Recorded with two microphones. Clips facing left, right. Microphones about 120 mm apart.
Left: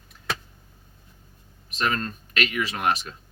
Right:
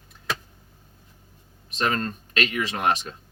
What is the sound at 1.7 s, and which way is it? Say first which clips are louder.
Speech: right 1 dB; 35° right (ahead or behind).